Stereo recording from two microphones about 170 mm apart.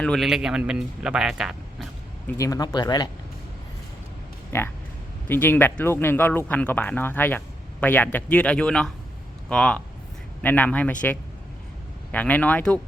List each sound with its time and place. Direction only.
0.0 s a man's voice: centre (ahead or behind)
2.2 s speech: 20° left (ahead or behind)
4.5 s a man's voice: 15° left (ahead or behind)
12.1 s speech: 10° left (ahead or behind)